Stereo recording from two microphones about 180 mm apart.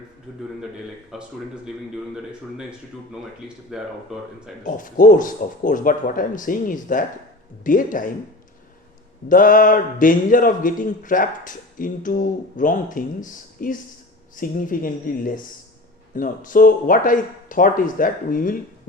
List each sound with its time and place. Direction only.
1.1 s speech: 5° right (ahead or behind)
4.6 s a man's voice: 50° left (ahead or behind)
9.3 s a man's voice: 50° left (ahead or behind)